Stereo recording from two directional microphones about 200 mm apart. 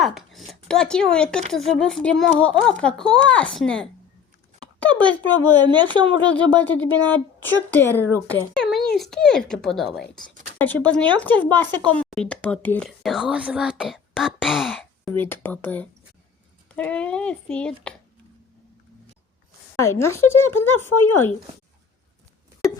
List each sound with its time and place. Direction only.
0.0 s speech: centre (ahead or behind)
4.6 s a sound: 5° left (ahead or behind)
5.2 s a woman's voice: 85° left
5.7 s speech: 20° right (ahead or behind)
6.6 s a woman's voice: 10° left (ahead or behind)
19.7 s a woman's voice: 15° left (ahead or behind)